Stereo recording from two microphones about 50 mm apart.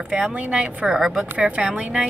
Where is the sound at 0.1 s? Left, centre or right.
Right.